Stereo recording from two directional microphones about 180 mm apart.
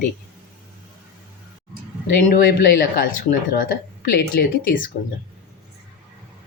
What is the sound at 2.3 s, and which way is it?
Speech, 50° left (ahead or behind).